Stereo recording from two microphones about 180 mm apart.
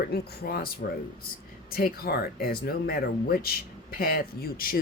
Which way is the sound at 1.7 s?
55° left (ahead or behind).